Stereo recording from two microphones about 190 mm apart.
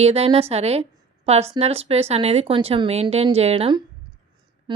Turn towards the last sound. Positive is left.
turn(degrees=-30)  # may be behind; listen again after turning